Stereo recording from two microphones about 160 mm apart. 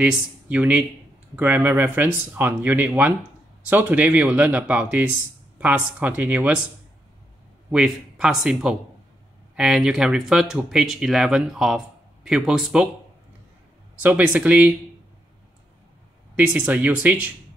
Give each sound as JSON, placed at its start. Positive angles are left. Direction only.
{"t": 0.0, "sound": "speech", "side_deg": -10}
{"t": 7.7, "sound": "speech", "side_deg": -5}
{"t": 14.0, "sound": "speech", "side_deg": -10}
{"t": 16.3, "sound": "speech", "side_deg": -10}